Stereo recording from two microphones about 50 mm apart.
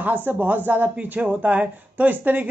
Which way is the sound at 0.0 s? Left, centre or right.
Right.